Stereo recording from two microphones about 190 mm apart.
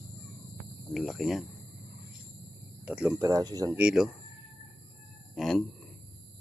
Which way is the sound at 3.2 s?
20° right (ahead or behind).